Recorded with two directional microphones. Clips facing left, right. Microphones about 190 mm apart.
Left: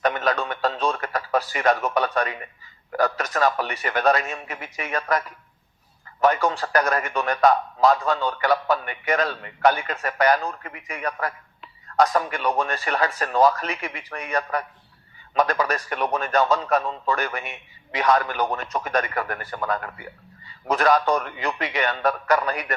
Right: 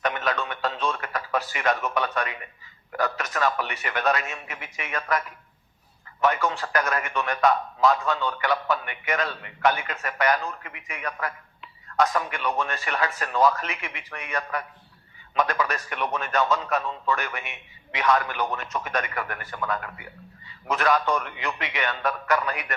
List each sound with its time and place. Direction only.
0.0 s radio: 40° left (ahead or behind)
2.9 s a man's voice: 35° left (ahead or behind)